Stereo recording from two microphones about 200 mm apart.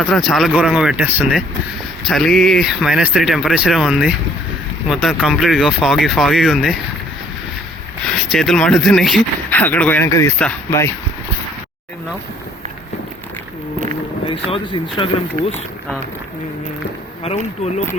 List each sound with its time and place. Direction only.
0.1 s speech: centre (ahead or behind)
8.0 s speech: centre (ahead or behind)
14.3 s speech: 25° left (ahead or behind)
17.3 s speech: 30° left (ahead or behind)